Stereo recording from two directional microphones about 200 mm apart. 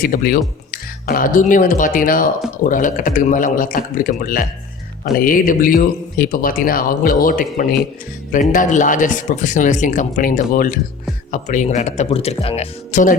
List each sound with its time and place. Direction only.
0.0 s speech: 45° left (ahead or behind)